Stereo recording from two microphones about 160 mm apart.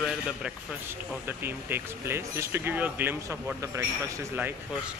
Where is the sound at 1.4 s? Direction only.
15° right (ahead or behind).